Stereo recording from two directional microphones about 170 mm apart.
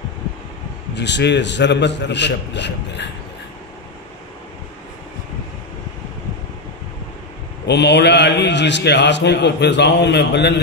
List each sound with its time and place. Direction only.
0.9 s a man's voice: 90° left
7.6 s a man's voice: 80° left